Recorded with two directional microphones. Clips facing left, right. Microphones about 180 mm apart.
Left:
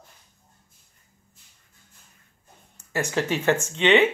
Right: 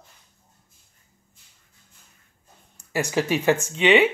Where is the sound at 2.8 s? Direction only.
10° right (ahead or behind).